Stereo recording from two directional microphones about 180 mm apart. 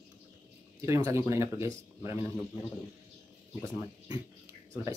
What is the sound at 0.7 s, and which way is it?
Speech, 15° right (ahead or behind).